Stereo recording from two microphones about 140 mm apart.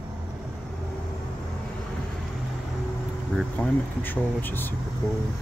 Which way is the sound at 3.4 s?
10° left (ahead or behind).